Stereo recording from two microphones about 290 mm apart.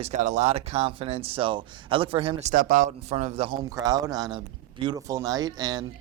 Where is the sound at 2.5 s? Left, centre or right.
Right.